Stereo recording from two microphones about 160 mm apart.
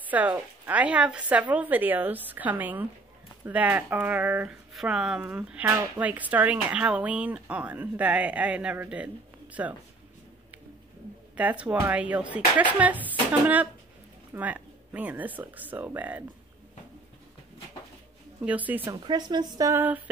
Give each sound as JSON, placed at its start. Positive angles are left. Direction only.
{"t": 0.1, "sound": "speech", "side_deg": -10}
{"t": 11.3, "sound": "speech", "side_deg": -10}
{"t": 14.3, "sound": "speech", "side_deg": -10}
{"t": 18.9, "sound": "speech", "side_deg": -25}